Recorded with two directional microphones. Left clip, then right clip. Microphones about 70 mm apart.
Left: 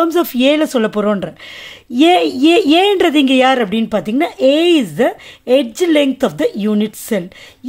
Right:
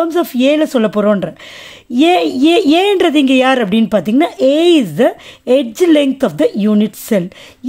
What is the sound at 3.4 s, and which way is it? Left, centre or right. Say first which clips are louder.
A woman's voice: right 1 dB; right.